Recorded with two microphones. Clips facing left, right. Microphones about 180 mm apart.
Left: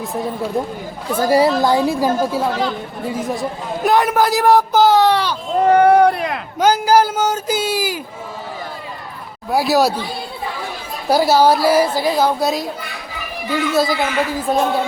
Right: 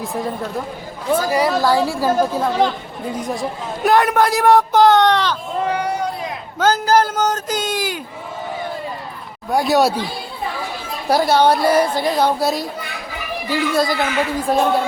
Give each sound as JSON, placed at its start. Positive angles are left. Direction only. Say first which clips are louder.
{"t": 0.0, "sound": "a man's voice", "louder": "left 1 dB", "side_deg": 0}
{"t": 1.3, "sound": "a woman's voice", "louder": "left 5 dB", "side_deg": 25}
{"t": 5.5, "sound": "a sound", "louder": "left 12 dB", "side_deg": 50}
{"t": 6.6, "sound": "a sound", "louder": "left 2 dB", "side_deg": 10}
{"t": 9.5, "sound": "a man's voice", "louder": "even", "side_deg": 5}
{"t": 11.1, "sound": "a man's voice", "louder": "left 1 dB", "side_deg": 5}